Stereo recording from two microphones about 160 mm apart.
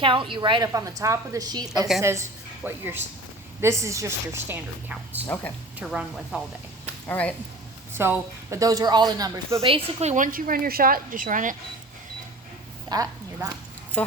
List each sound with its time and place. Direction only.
0.0 s a woman's voice: 30° right (ahead or behind); by 5.2 s 10° right (ahead or behind)
5.2 s speech: 10° left (ahead or behind)
5.8 s speech: 5° right (ahead or behind)
7.1 s speech: 10° left (ahead or behind)
7.9 s a woman's voice: 15° right (ahead or behind)
9.6 s a woman's voice: 40° right (ahead or behind)
10.3 s speech: 65° right (ahead or behind)
12.9 s a woman's voice: 20° right (ahead or behind)